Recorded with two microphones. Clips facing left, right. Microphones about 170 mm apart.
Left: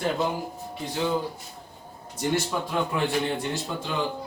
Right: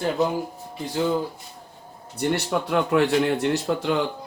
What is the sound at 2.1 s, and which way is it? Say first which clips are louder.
A man's voice: right 3 dB; 65° right (ahead or behind).